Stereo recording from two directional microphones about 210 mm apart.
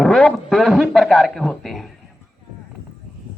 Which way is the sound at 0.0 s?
Centre (ahead or behind).